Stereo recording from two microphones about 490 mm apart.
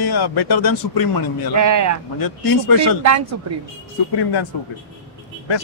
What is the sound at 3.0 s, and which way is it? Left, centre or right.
Speech, right.